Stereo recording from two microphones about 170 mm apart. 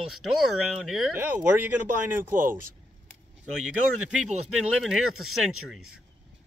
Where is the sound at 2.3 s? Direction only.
55° right (ahead or behind).